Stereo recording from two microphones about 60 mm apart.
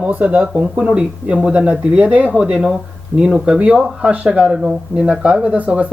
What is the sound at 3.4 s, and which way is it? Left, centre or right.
Speech, centre.